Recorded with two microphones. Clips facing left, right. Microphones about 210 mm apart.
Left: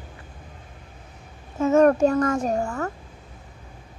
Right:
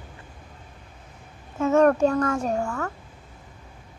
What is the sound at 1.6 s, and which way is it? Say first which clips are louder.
Speech: left 2 dB; 5° left (ahead or behind).